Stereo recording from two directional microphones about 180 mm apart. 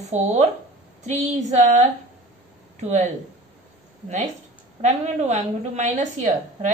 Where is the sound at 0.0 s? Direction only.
40° right (ahead or behind).